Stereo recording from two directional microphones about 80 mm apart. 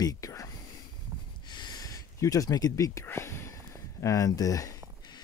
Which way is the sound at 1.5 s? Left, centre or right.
Left.